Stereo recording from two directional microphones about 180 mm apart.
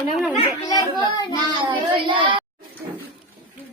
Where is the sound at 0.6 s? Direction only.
25° left (ahead or behind).